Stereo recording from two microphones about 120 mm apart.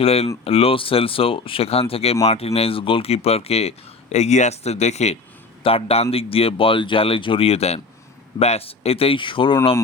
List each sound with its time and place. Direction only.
0.0 s speech: 55° left (ahead or behind)
5.6 s speech: 55° left (ahead or behind)